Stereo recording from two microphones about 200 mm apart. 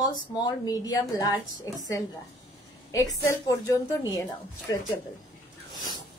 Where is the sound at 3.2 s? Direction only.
15° left (ahead or behind).